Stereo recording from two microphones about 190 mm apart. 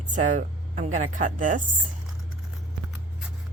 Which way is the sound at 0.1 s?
40° right (ahead or behind).